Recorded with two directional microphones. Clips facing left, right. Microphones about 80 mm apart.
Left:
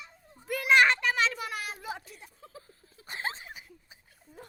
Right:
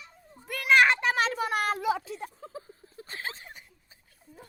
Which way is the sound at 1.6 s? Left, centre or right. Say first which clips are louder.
Right 11 dB; right.